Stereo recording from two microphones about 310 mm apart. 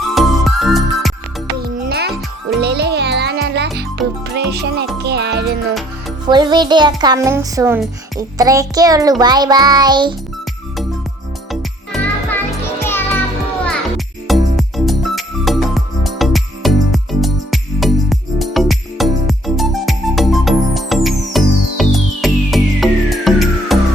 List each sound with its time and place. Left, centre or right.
0.1 s music: centre
1.8 s music: right
6.2 s a child's voice: centre
11.9 s music: centre